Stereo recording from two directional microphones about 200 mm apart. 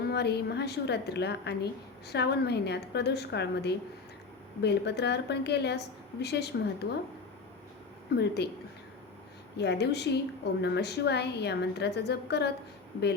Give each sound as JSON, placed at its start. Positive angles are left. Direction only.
{"t": 0.0, "sound": "a woman's voice", "side_deg": 55}
{"t": 8.1, "sound": "a woman's voice", "side_deg": 55}
{"t": 9.6, "sound": "a woman's voice", "side_deg": 55}